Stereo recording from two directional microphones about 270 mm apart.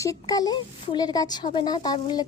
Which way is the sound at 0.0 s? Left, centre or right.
Centre.